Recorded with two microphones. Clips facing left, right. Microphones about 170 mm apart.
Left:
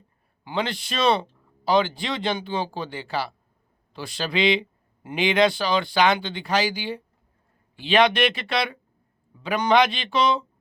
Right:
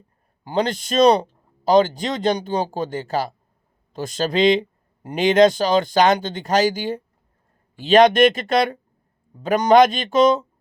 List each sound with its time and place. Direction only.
0.4 s a man's voice: 40° right (ahead or behind)